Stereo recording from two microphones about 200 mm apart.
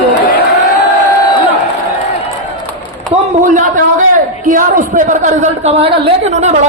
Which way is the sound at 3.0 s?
40° right (ahead or behind).